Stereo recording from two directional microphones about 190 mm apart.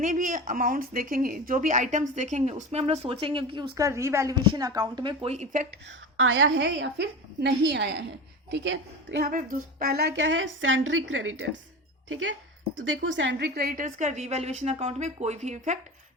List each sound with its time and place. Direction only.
0.0 s a woman's voice: 45° right (ahead or behind)
6.1 s a woman's voice: 85° right
9.2 s a woman's voice: 45° right (ahead or behind)